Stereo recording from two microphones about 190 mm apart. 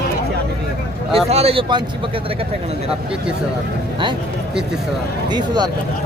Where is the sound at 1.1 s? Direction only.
30° right (ahead or behind).